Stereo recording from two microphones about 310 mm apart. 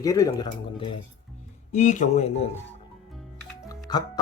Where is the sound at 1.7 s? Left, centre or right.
Left.